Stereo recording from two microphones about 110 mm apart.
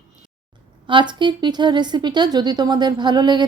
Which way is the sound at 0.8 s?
45° right (ahead or behind).